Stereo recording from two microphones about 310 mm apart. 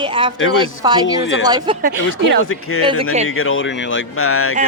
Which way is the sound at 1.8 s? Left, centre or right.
Right.